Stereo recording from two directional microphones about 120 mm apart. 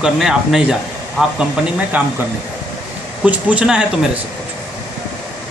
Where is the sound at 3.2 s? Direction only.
10° right (ahead or behind).